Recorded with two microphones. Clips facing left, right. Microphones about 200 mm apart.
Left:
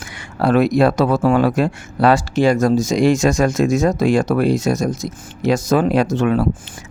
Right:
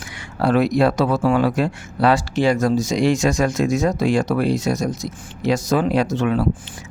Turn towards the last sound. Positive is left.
turn(degrees=50)  # may be behind; listen again after turning